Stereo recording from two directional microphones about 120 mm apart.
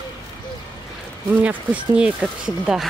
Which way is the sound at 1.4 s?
10° right (ahead or behind).